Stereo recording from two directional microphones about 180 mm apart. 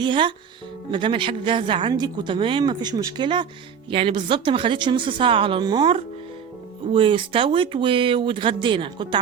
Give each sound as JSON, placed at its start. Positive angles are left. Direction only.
{"t": 0.0, "sound": "speech", "side_deg": -25}